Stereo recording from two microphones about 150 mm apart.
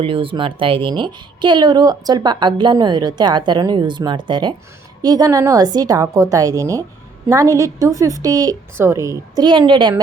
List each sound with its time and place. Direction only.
0.0 s a woman's voice: 35° right (ahead or behind)